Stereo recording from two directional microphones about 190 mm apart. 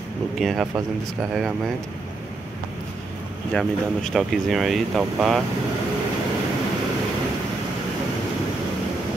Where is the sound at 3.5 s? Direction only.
Centre (ahead or behind).